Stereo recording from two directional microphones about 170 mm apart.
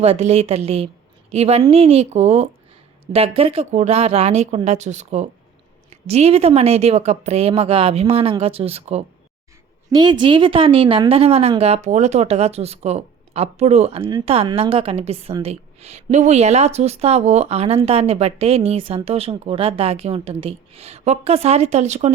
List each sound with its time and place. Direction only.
0.0 s a woman's voice: 35° right (ahead or behind)
9.9 s a woman's voice: 25° right (ahead or behind); by 22.1 s 40° right (ahead or behind)